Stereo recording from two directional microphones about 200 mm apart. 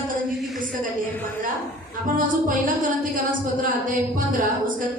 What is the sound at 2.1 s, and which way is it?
Speech, 45° right (ahead or behind).